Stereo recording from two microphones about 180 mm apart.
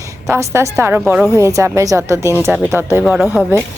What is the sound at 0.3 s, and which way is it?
Speech, 15° right (ahead or behind).